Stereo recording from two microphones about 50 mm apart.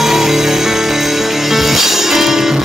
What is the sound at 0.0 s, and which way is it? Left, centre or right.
Music, centre.